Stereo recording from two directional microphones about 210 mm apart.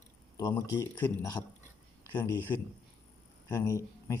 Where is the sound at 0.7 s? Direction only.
10° left (ahead or behind).